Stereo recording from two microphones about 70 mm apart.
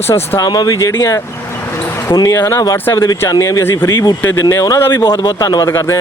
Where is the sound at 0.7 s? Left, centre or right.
Left.